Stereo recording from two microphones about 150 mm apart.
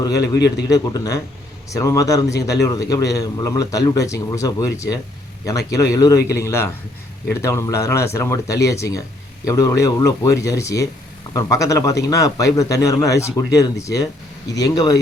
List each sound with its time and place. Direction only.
0.0 s a man's voice: 25° left (ahead or behind)